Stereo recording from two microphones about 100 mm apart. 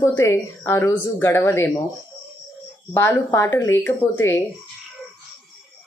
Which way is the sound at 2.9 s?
25° left (ahead or behind).